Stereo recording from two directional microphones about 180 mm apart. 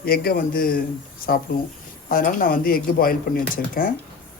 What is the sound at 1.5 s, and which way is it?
Speech, 55° left (ahead or behind).